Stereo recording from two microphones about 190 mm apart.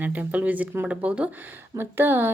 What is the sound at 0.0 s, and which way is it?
A woman's voice, 10° right (ahead or behind).